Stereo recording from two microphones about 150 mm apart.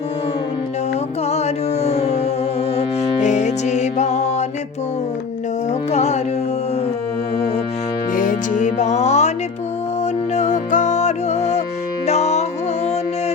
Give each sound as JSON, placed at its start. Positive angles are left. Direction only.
{"t": 1.3, "sound": "carnatic music", "side_deg": 45}
{"t": 2.7, "sound": "music", "side_deg": 50}
{"t": 5.9, "sound": "music", "side_deg": 45}
{"t": 8.1, "sound": "music", "side_deg": 65}
{"t": 10.3, "sound": "music", "side_deg": 50}